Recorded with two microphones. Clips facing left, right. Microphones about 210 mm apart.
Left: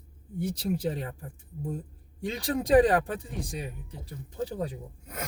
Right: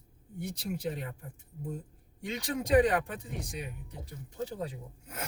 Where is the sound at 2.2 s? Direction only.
35° left (ahead or behind).